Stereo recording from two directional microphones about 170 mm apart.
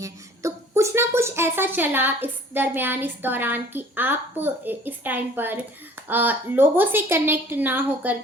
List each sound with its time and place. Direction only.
0.0 s a woman's voice: 15° right (ahead or behind)